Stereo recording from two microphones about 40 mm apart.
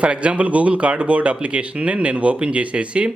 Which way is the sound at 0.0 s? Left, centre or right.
Right.